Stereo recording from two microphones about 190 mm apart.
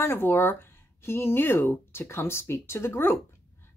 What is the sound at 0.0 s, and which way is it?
Speech, 10° left (ahead or behind).